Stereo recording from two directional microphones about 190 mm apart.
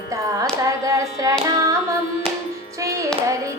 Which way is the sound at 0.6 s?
15° right (ahead or behind).